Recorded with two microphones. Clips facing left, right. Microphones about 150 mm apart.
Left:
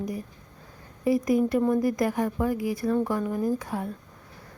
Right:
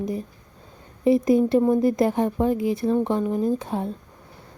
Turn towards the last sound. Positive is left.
turn(degrees=-25)  # may be behind; listen again after turning